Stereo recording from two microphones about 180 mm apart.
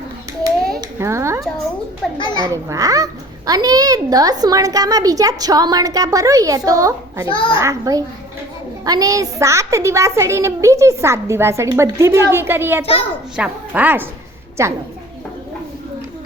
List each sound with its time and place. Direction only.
0.8 s a sound: 15° right (ahead or behind)
2.1 s a child's voice: 25° left (ahead or behind)
2.4 s a child's voice: 20° right (ahead or behind)
7.3 s a child's voice: 30° left (ahead or behind)
7.5 s a child's voice: 15° right (ahead or behind)